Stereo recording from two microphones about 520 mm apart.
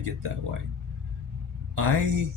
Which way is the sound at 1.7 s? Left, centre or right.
Right.